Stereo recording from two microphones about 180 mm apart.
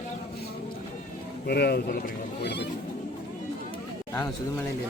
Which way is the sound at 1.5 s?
60° left (ahead or behind).